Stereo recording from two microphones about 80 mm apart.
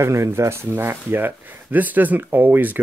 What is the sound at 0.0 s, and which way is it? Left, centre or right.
Speech, right.